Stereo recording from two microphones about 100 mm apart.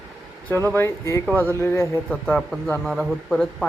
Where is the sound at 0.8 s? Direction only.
30° left (ahead or behind).